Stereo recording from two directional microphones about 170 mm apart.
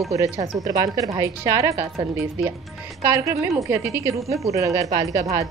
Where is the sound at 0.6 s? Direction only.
20° right (ahead or behind).